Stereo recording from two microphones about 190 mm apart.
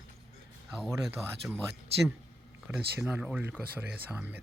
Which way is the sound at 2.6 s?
10° right (ahead or behind).